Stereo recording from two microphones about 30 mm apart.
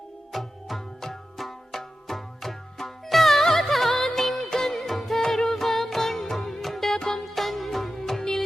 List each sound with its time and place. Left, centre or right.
0.3 s music: centre
4.4 s music: left
4.7 s music: centre
7.2 s music: centre